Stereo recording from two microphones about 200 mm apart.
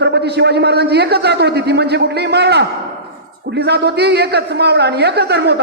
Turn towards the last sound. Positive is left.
turn(degrees=-55)  # may be behind; listen again after turning